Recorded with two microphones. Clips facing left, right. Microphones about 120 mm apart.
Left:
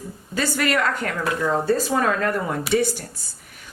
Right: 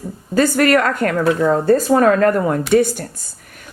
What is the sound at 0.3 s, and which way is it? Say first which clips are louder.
Speech: right 9 dB; 45° right (ahead or behind).